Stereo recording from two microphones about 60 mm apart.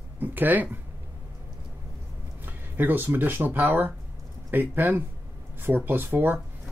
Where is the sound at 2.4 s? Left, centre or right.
Right.